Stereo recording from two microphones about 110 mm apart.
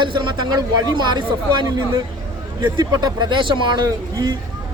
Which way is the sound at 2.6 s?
40° right (ahead or behind).